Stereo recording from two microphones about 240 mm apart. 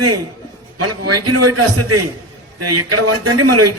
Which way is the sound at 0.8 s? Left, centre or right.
Right.